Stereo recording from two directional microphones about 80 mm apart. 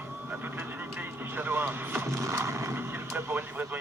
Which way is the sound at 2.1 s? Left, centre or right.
Right.